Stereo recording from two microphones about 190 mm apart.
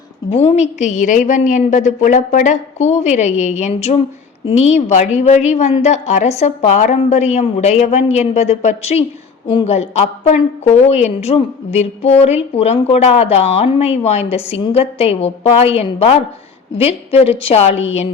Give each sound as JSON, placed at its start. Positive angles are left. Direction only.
{"t": 0.3, "sound": "a woman's voice", "side_deg": 30}